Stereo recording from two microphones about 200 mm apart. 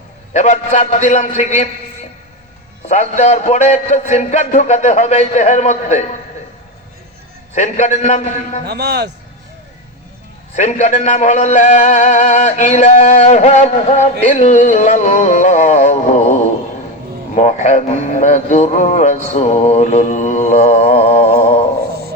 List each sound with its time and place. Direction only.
0.3 s a man's voice: 35° left (ahead or behind)
2.9 s a man's voice: 35° left (ahead or behind)
7.5 s a man's voice: 35° left (ahead or behind)
8.6 s a man's voice: 55° right (ahead or behind)
10.5 s a man's voice: 35° left (ahead or behind)